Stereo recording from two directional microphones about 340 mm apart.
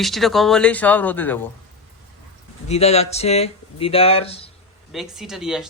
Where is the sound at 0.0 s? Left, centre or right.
Centre.